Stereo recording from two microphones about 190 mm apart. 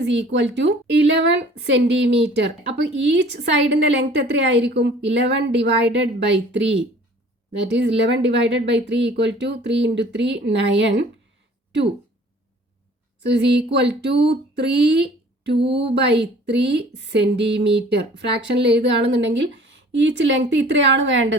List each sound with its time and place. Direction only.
0.0 s a woman's voice: 70° right (ahead or behind)
13.2 s a woman's voice: 65° right (ahead or behind)